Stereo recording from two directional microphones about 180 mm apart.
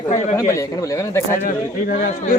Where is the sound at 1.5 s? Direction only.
45° left (ahead or behind).